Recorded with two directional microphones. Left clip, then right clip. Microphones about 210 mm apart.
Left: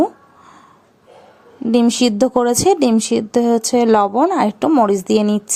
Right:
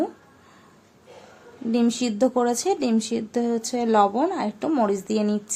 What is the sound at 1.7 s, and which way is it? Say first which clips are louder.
Speech: left 9 dB; 35° left (ahead or behind).